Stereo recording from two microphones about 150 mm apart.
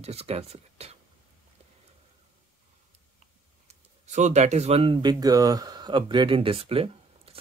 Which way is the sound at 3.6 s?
50° right (ahead or behind).